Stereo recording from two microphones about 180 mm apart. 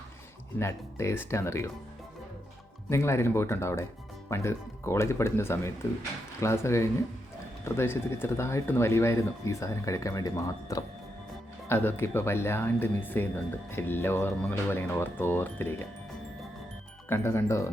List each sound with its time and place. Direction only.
0.6 s speech: 15° left (ahead or behind)
2.9 s speech: 15° left (ahead or behind)
17.1 s speech: 15° left (ahead or behind)